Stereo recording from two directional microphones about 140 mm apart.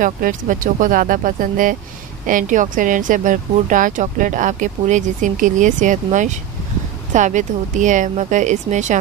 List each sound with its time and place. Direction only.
0.0 s speech: 70° right (ahead or behind)